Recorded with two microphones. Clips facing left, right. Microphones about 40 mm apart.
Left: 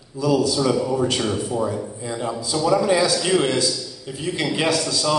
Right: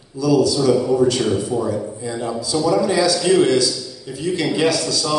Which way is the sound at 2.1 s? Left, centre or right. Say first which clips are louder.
Right 2 dB; centre.